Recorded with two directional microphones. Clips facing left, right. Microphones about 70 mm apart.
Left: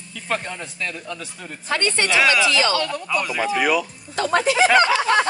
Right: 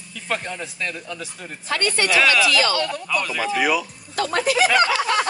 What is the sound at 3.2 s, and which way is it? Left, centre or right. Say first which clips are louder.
Speech: left 1 dB; centre.